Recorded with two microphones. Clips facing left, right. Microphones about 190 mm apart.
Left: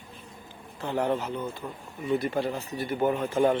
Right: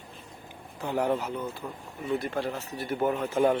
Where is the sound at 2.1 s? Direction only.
Centre (ahead or behind).